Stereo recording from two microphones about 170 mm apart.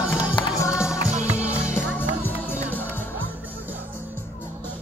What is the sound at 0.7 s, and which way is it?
Music, 5° right (ahead or behind).